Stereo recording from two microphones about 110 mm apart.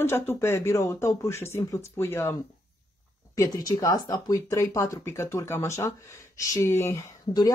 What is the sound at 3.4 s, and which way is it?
Speech, 35° left (ahead or behind).